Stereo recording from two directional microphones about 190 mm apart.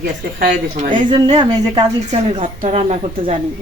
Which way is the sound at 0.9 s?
25° right (ahead or behind).